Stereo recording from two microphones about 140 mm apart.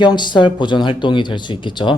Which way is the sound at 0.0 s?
30° left (ahead or behind).